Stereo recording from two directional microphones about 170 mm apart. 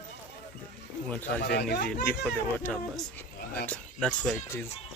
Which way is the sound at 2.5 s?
10° left (ahead or behind).